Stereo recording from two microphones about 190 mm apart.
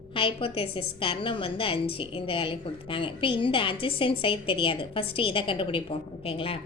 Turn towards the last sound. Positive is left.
turn(degrees=30)  # may be behind; listen again after turning